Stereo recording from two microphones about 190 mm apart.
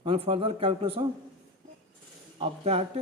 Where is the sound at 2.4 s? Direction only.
30° right (ahead or behind).